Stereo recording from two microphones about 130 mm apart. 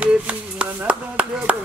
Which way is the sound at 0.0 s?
10° right (ahead or behind).